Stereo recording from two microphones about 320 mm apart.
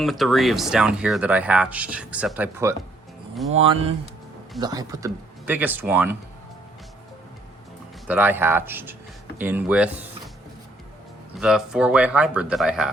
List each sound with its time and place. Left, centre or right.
0.0 s speech: centre
3.5 s speech: centre
8.0 s speech: centre
11.3 s speech: centre